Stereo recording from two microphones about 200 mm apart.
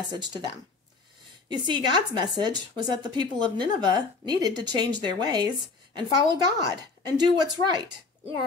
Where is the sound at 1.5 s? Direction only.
20° right (ahead or behind).